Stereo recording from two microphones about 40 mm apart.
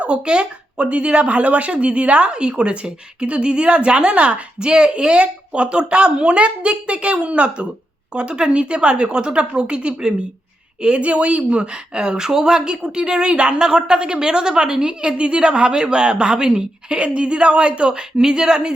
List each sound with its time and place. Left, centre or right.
0.0 s a woman's voice: right